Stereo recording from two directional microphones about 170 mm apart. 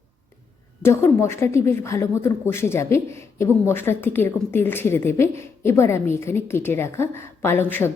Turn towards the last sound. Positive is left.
turn(degrees=10)  # may be behind; listen again after turning